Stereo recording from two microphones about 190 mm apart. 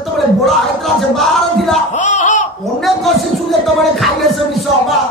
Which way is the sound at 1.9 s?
40° left (ahead or behind).